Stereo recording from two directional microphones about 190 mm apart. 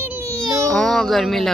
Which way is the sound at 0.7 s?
Centre (ahead or behind).